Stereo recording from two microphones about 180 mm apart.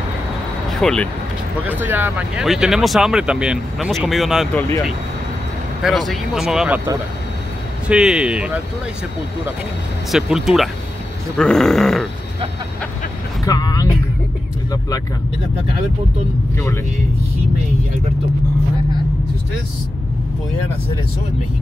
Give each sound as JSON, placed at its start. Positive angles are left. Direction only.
{"t": 0.7, "sound": "speech", "side_deg": 5}
{"t": 1.7, "sound": "speech", "side_deg": -10}
{"t": 5.8, "sound": "speech", "side_deg": 0}
{"t": 7.9, "sound": "speech", "side_deg": -5}
{"t": 10.1, "sound": "speech", "side_deg": 0}
{"t": 13.5, "sound": "vehicle", "side_deg": 20}
{"t": 16.5, "sound": "speech", "side_deg": 15}